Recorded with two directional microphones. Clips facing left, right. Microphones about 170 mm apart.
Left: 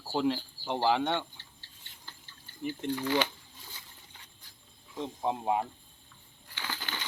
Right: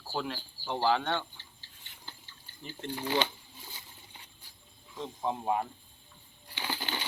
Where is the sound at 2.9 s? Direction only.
25° right (ahead or behind).